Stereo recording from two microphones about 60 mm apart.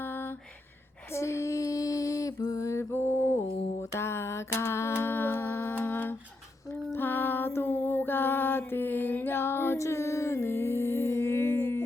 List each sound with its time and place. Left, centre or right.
0.0 s a sound: left
1.1 s female singing: left
2.6 s mantra: left
3.9 s a sound: left
6.7 s music: left
9.7 s music: left